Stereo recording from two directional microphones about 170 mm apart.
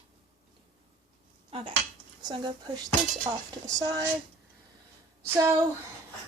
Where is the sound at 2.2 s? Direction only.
25° right (ahead or behind).